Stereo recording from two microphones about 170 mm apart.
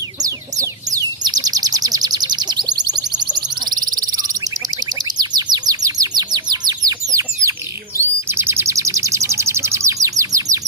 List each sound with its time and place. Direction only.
0.2 s chicken: 20° right (ahead or behind)
7.9 s bird: 15° right (ahead or behind)